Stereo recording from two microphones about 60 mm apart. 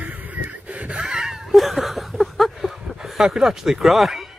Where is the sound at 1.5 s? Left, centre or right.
Centre.